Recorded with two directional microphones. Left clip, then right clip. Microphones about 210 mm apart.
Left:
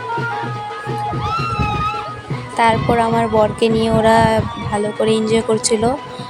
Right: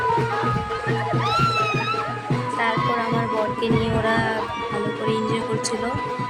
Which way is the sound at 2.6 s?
25° left (ahead or behind).